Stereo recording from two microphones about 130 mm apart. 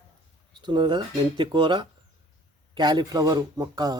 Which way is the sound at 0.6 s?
35° right (ahead or behind).